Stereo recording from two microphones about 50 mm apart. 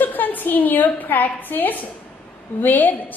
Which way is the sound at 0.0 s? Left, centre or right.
Left.